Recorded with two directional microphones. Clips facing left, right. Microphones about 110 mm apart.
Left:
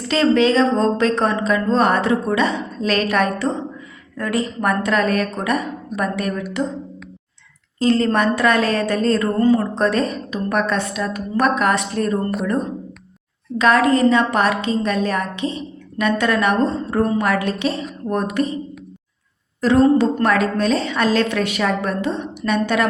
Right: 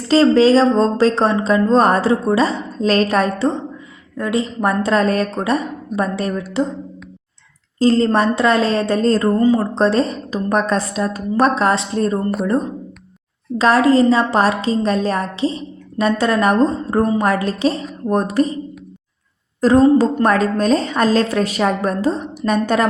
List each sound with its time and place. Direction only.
0.1 s a woman's voice: 35° right (ahead or behind)
7.8 s a woman's voice: 30° right (ahead or behind)
13.6 s a woman's voice: 30° right (ahead or behind)
19.6 s a woman's voice: 40° right (ahead or behind)